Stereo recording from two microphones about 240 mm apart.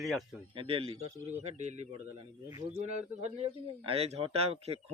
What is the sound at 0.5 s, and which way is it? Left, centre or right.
Speech, right.